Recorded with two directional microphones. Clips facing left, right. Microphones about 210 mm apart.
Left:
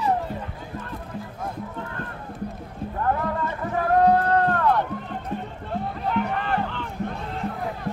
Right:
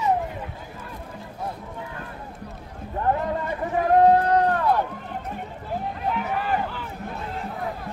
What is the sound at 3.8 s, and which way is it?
Run, 15° right (ahead or behind).